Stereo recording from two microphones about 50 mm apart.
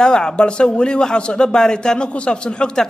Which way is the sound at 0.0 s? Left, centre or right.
Centre.